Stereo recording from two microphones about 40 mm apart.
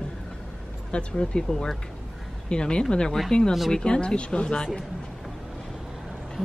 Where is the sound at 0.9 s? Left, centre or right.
Left.